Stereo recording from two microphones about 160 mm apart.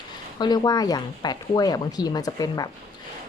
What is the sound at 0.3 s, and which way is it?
Speech, 25° left (ahead or behind).